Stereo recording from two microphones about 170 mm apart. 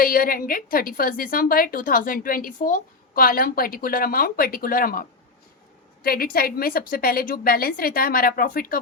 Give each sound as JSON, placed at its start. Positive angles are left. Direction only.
{"t": 0.0, "sound": "a woman's voice", "side_deg": 60}